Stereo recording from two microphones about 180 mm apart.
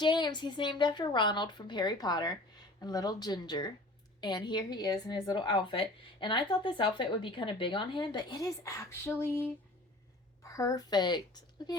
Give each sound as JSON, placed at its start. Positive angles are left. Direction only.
{"t": 0.0, "sound": "a woman's voice", "side_deg": 25}